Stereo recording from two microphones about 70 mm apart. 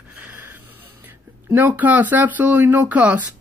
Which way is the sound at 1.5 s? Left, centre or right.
Right.